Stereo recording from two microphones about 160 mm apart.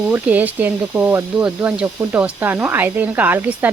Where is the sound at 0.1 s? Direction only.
10° right (ahead or behind).